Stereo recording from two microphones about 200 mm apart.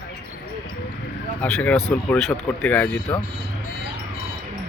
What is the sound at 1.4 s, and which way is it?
Speech, 5° left (ahead or behind).